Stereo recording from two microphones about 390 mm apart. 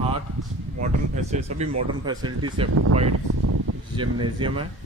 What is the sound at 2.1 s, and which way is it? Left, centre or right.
Speech, centre.